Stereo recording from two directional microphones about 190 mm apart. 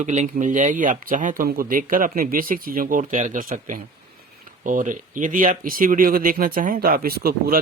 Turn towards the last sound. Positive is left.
turn(degrees=-50)  # may be behind; listen again after turning